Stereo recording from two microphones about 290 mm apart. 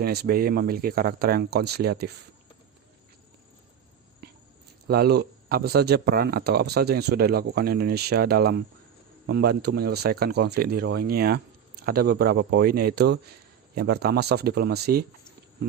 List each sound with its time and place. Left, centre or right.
0.0 s speech: right
4.9 s speech: right